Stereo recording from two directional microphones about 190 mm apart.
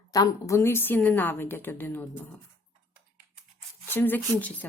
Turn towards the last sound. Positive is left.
turn(degrees=10)  # may be behind; listen again after turning